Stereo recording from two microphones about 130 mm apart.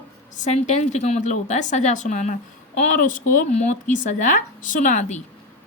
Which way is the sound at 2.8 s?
90° left.